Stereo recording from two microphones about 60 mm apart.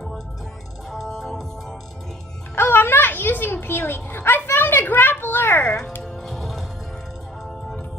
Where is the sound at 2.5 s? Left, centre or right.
Left.